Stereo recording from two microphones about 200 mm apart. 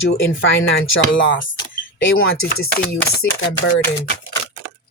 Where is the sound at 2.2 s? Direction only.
90° left.